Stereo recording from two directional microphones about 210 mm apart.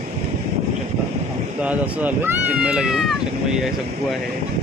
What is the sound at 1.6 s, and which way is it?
Speech, 5° right (ahead or behind).